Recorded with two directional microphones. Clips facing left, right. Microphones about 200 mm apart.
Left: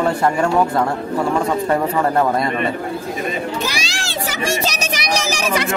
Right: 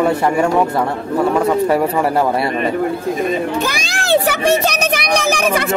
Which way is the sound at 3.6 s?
55° right (ahead or behind).